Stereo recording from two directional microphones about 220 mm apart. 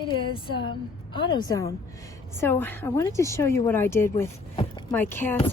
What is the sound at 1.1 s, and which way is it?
A woman's voice, 20° left (ahead or behind).